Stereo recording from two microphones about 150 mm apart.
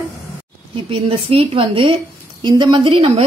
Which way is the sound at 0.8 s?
35° right (ahead or behind).